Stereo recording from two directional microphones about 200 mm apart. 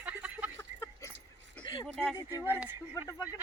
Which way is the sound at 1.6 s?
25° left (ahead or behind).